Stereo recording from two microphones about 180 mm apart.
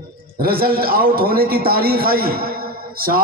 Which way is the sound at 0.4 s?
55° right (ahead or behind).